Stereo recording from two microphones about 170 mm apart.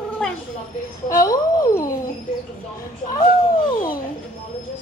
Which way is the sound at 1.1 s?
20° left (ahead or behind).